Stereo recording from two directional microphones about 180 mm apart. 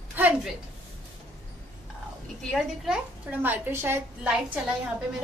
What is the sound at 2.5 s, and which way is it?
A woman's voice, 5° right (ahead or behind).